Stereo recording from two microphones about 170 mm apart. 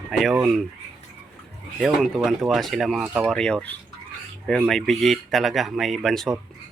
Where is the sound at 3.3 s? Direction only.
5° left (ahead or behind).